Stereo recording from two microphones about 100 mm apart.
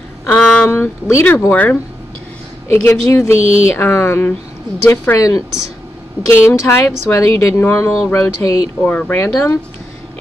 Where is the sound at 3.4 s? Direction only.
75° right (ahead or behind).